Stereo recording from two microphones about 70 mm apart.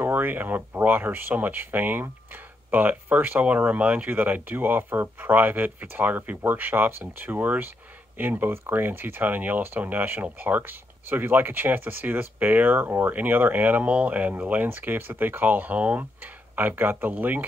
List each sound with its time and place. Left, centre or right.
0.0 s speech: right